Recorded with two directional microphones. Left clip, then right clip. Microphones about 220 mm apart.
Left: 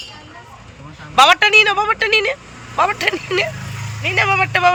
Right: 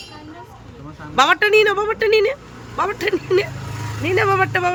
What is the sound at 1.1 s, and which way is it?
Speech, 15° right (ahead or behind).